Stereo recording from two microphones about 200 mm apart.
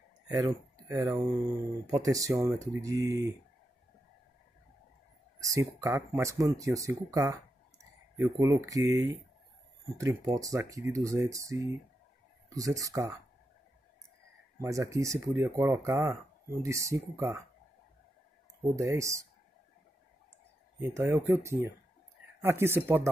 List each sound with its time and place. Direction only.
0.3 s speech: 15° right (ahead or behind)
5.4 s speech: 15° right (ahead or behind)
14.6 s speech: 15° right (ahead or behind)
18.8 s speech: 15° right (ahead or behind)
20.9 s speech: 10° right (ahead or behind)